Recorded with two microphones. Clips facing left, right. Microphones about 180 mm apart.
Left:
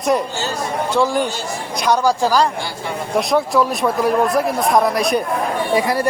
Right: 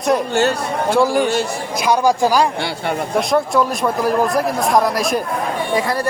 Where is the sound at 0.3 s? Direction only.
60° right (ahead or behind).